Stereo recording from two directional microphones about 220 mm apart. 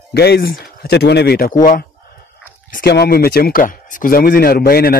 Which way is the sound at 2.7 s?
45° left (ahead or behind).